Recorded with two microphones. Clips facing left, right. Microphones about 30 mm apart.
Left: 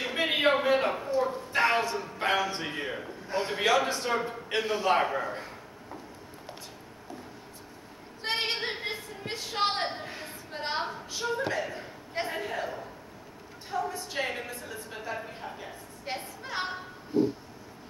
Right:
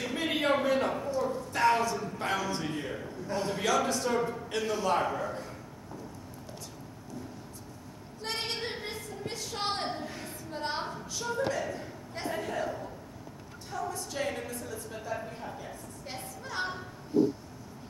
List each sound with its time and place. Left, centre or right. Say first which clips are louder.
0.0 s a man's voice: left 4 dB; left
8.2 s a sound: left 5 dB; left
13.7 s a man's voice: left 3 dB; left